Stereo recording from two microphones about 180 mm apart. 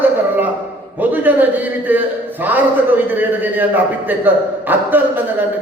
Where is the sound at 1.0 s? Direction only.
10° right (ahead or behind).